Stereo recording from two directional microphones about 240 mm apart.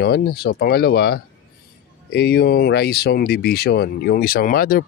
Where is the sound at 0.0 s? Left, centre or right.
Left.